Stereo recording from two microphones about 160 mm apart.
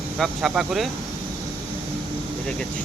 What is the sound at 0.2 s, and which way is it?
Speech, centre (ahead or behind).